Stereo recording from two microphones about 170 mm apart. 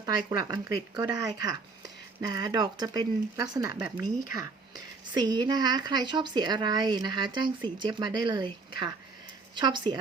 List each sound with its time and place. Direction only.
0.3 s a woman's voice: 20° right (ahead or behind)
9.6 s a woman's voice: 25° right (ahead or behind)